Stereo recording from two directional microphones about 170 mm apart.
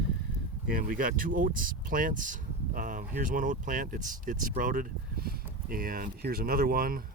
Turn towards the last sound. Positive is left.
turn(degrees=-60)  # may be behind; listen again after turning